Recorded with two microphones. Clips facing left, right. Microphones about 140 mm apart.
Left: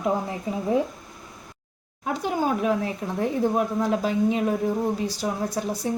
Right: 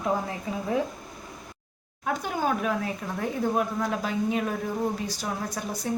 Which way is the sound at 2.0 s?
25° left (ahead or behind).